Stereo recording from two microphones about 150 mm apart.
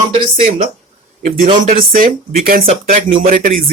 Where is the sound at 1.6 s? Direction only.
70° right (ahead or behind).